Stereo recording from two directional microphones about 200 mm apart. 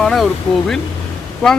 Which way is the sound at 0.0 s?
Centre (ahead or behind).